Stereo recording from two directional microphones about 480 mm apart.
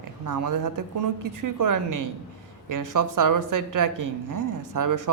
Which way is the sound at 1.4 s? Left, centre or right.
Right.